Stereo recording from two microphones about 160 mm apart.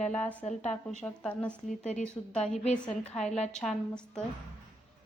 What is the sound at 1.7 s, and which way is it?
Speech, 50° left (ahead or behind).